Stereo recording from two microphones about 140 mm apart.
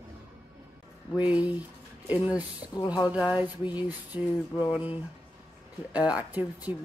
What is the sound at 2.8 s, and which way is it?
Speech, 30° left (ahead or behind).